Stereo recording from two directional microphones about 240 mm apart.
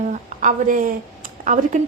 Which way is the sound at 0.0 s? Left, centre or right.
Right.